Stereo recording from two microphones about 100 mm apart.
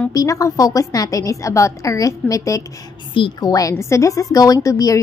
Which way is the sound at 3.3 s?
40° left (ahead or behind).